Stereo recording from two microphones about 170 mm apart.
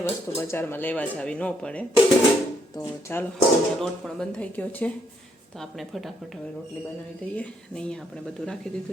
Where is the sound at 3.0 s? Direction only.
10° left (ahead or behind).